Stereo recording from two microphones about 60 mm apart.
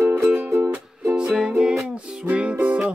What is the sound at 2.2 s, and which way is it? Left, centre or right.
Music, right.